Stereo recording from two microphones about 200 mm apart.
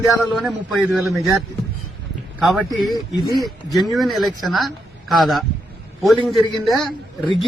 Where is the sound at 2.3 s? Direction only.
5° right (ahead or behind).